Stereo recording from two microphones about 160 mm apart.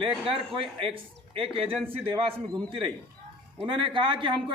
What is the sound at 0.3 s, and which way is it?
Speech, 35° right (ahead or behind).